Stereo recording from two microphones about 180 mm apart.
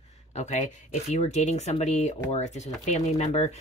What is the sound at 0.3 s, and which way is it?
Speech, 40° left (ahead or behind).